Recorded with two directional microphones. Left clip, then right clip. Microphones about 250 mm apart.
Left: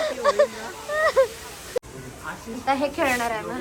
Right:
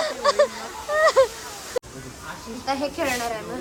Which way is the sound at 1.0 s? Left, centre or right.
Centre.